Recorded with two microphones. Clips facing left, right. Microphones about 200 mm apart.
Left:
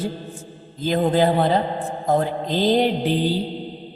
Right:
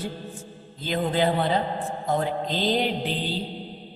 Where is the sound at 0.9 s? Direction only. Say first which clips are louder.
Left 5 dB; 45° left (ahead or behind).